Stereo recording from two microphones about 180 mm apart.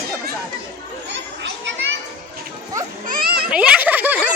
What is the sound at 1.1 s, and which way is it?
Children playing, 75° right (ahead or behind).